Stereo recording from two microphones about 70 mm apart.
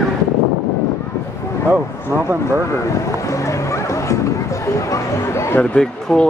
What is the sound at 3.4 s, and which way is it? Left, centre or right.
Music, left.